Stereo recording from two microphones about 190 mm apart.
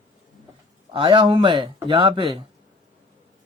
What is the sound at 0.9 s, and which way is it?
A man's voice, 25° right (ahead or behind).